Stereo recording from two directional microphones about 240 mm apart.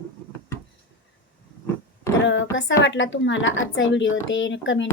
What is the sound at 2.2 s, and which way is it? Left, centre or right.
A woman's voice, left.